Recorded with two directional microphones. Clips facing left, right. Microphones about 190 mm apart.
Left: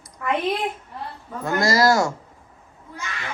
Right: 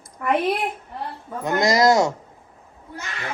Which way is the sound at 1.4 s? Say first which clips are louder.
Right 1 dB; 20° right (ahead or behind).